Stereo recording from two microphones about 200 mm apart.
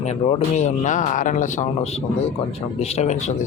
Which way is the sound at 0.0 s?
30° left (ahead or behind).